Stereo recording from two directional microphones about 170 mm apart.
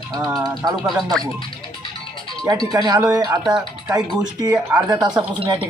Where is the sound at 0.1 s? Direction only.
20° right (ahead or behind).